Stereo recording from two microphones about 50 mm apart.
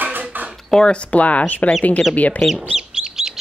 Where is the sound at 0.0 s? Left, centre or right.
Right.